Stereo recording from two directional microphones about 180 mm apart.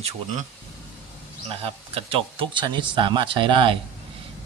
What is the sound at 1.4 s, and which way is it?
Speech, 35° right (ahead or behind).